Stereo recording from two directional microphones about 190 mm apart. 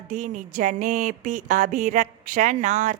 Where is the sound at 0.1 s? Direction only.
40° right (ahead or behind).